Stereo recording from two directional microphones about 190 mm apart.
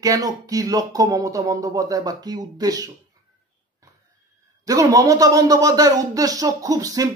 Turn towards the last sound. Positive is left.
turn(degrees=-20)  # may be behind; listen again after turning